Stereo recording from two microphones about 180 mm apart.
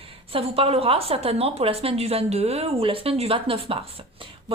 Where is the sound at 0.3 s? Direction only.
30° right (ahead or behind).